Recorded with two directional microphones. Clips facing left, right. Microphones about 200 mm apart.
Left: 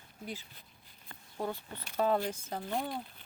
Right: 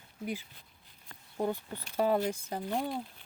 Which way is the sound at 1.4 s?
15° right (ahead or behind).